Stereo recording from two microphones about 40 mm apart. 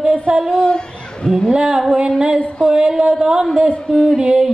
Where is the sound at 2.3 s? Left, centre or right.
Centre.